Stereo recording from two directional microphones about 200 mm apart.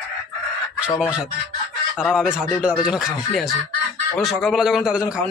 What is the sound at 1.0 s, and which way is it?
Speech, 5° right (ahead or behind).